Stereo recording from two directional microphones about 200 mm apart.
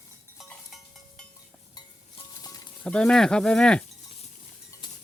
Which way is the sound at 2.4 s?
20° left (ahead or behind).